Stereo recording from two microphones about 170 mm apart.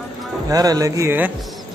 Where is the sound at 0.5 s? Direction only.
20° right (ahead or behind).